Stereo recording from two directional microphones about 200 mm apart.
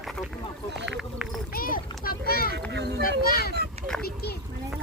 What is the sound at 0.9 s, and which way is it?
Speech, centre (ahead or behind).